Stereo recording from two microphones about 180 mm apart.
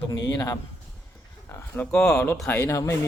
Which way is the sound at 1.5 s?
10° left (ahead or behind).